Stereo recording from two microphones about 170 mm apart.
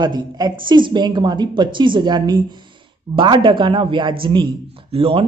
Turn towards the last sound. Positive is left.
turn(degrees=-35)  # may be behind; listen again after turning